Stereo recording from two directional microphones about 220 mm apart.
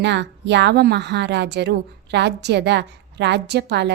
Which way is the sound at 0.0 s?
50° right (ahead or behind).